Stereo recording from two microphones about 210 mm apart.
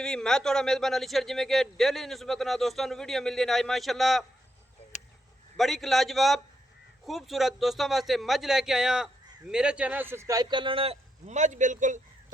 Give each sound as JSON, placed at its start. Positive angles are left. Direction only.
{"t": 0.0, "sound": "a man's voice", "side_deg": 5}
{"t": 4.9, "sound": "a sound", "side_deg": 35}
{"t": 5.5, "sound": "a man's voice", "side_deg": 0}